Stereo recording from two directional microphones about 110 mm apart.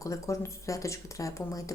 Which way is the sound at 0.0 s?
30° left (ahead or behind).